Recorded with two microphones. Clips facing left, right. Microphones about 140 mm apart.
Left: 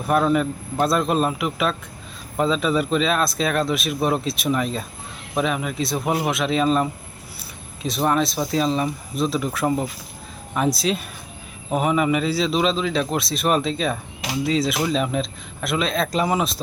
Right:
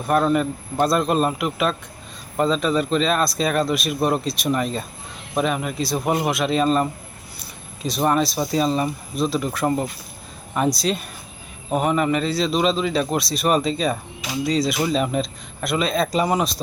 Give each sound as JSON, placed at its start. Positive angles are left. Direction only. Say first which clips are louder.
{"t": 0.0, "sound": "speech", "louder": "even", "side_deg": 0}